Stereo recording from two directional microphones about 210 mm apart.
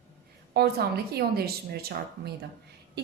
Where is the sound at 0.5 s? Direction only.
50° right (ahead or behind).